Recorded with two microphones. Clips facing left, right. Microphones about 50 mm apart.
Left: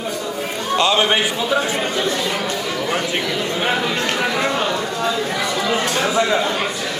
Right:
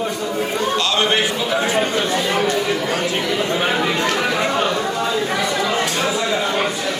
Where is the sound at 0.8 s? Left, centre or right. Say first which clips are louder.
Left 4 dB; centre.